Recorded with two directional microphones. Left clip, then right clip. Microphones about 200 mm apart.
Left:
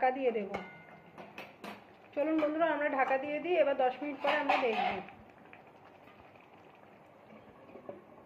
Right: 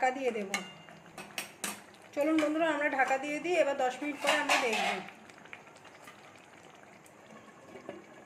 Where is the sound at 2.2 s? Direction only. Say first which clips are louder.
Right 1 dB; 20° right (ahead or behind).